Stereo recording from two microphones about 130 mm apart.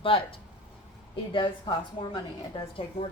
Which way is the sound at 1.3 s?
40° left (ahead or behind).